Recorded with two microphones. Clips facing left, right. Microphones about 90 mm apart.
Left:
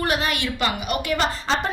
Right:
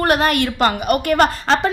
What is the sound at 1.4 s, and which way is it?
Speech, 90° right.